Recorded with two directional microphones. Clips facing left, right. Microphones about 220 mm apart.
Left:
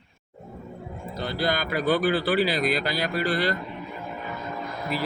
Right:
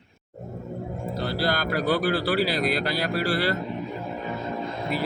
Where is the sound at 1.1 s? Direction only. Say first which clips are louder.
Even; 5° right (ahead or behind).